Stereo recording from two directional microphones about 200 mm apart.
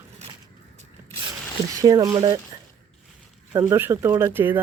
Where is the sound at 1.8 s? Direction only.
20° right (ahead or behind).